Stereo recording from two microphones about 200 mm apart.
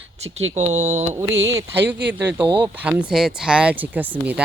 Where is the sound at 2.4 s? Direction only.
25° right (ahead or behind).